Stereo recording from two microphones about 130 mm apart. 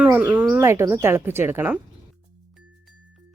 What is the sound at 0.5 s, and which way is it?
Speech, 20° right (ahead or behind).